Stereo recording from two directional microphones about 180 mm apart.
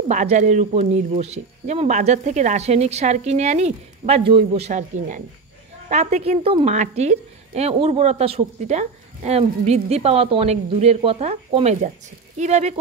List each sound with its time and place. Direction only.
0.1 s a woman's voice: 45° right (ahead or behind)